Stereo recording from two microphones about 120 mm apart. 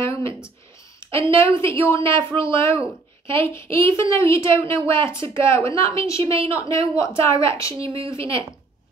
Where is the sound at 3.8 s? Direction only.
45° right (ahead or behind).